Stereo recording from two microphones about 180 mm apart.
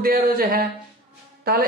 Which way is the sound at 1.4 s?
60° right (ahead or behind).